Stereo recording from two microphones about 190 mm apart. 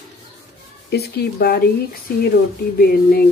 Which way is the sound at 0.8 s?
60° left (ahead or behind).